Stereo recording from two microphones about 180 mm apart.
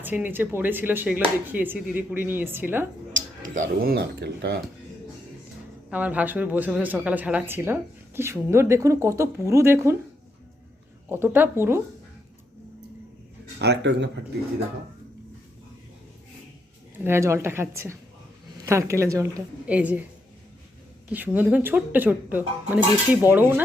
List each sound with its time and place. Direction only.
0.0 s speech: 10° right (ahead or behind)
3.8 s speech: 60° right (ahead or behind)
5.9 s speech: 10° right (ahead or behind)
11.1 s speech: 10° right (ahead or behind)
13.6 s speech: 75° right (ahead or behind)
16.9 s a woman's voice: 15° right (ahead or behind)
21.1 s speech: 10° right (ahead or behind)